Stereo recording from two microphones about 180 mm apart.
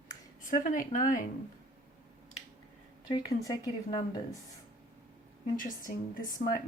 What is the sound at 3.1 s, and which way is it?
Speech, 20° left (ahead or behind).